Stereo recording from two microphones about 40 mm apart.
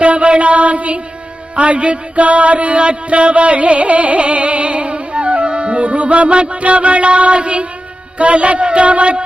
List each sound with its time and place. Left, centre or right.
0.0 s mantra: right
1.5 s music: right